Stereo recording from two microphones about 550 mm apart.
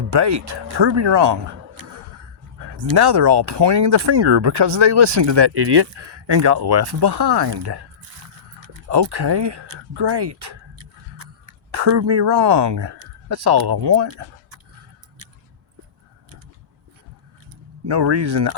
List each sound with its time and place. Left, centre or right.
0.1 s speech: right
2.6 s a sound: right
2.9 s speech: right
8.9 s speech: right
11.7 s speech: right
17.8 s speech: right